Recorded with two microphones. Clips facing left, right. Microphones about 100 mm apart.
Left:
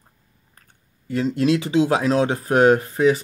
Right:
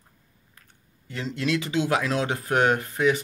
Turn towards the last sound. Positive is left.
turn(degrees=35)  # may be behind; listen again after turning